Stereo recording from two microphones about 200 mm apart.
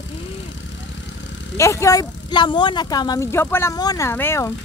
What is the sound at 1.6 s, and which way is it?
Speech, 15° left (ahead or behind).